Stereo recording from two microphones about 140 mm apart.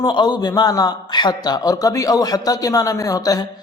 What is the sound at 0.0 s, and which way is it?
A man's voice, 30° left (ahead or behind).